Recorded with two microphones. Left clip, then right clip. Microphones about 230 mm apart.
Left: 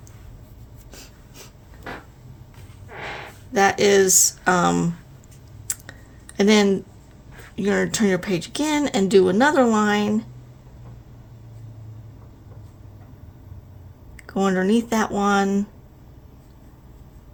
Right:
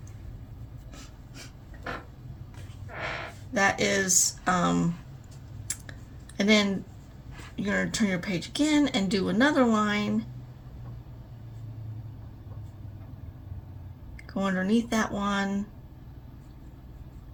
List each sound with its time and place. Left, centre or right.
3.5 s speech: left
6.3 s speech: left
14.3 s speech: left